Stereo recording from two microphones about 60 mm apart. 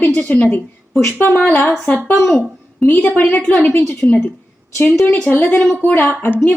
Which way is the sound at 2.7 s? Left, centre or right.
Left.